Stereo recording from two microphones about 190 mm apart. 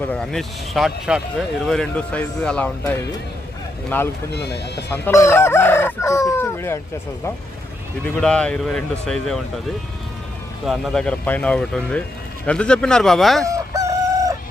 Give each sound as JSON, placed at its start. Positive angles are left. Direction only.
{"t": 0.1, "sound": "speech", "side_deg": 5}
{"t": 4.3, "sound": "speech", "side_deg": 60}
{"t": 4.9, "sound": "chicken", "side_deg": 15}
{"t": 8.0, "sound": "speech", "side_deg": 5}
{"t": 10.7, "sound": "speech", "side_deg": 5}
{"t": 13.4, "sound": "chicken", "side_deg": -15}